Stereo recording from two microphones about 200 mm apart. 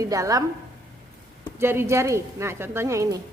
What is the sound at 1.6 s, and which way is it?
A woman's voice, 10° right (ahead or behind).